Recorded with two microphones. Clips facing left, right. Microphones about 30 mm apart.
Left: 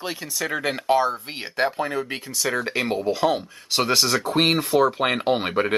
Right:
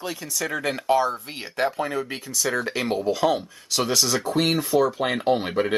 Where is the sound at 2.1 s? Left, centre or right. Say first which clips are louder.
Even; left.